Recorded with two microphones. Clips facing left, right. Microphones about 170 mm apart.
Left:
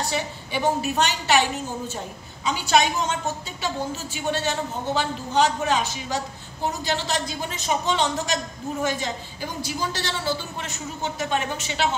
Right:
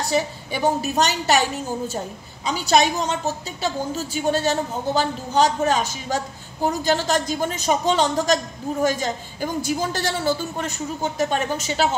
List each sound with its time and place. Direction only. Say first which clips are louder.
0.1 s a woman's voice: right 5 dB; 40° right (ahead or behind)
2.4 s a woman's voice: right 2 dB; 40° right (ahead or behind)